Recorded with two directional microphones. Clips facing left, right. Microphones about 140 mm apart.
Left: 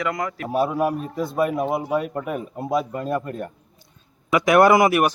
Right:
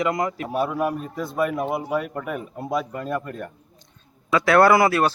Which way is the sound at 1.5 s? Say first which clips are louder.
Left 2 dB; centre (ahead or behind).